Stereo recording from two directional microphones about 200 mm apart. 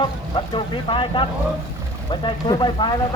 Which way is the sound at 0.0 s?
25° left (ahead or behind).